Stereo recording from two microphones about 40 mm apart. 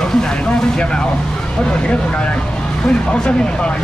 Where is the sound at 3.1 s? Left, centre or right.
Left.